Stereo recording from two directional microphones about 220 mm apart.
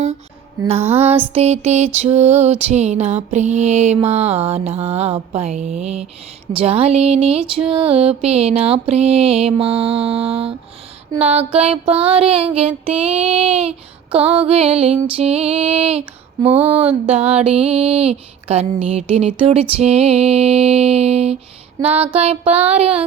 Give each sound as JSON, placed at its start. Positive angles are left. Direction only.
{"t": 0.6, "sound": "music", "side_deg": -20}
{"t": 1.3, "sound": "music", "side_deg": -30}